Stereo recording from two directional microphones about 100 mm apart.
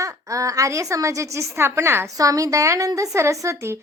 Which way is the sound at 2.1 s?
35° right (ahead or behind).